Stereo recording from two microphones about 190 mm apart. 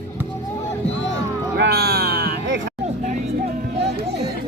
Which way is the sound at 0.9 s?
75° left (ahead or behind).